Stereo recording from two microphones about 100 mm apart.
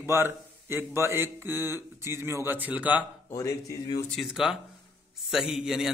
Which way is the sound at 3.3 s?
30° left (ahead or behind).